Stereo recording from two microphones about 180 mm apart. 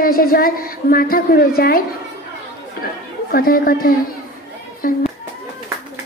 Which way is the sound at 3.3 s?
55° left (ahead or behind).